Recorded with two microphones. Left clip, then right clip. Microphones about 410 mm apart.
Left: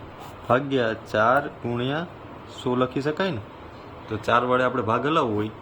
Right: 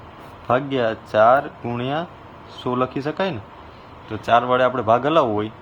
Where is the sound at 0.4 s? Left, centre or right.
Centre.